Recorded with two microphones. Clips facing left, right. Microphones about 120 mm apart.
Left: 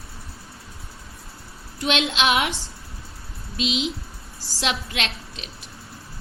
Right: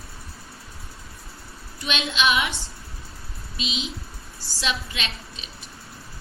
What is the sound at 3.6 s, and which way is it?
A woman's voice, 80° left.